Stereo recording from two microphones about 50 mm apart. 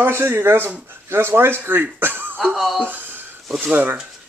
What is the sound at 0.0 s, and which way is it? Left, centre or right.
Speech, right.